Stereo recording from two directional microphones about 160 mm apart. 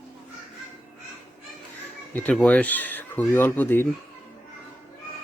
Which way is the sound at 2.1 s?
10° left (ahead or behind).